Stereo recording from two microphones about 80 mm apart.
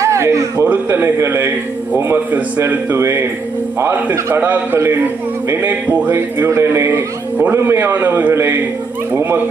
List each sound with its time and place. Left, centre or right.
0.0 s a sound: right
0.9 s a man's voice: right
6.1 s a man's voice: right